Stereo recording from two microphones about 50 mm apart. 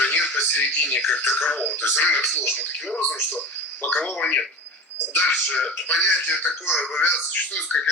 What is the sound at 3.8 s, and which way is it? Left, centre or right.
Speech, left.